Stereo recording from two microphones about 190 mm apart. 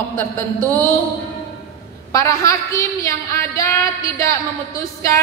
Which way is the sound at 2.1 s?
15° left (ahead or behind).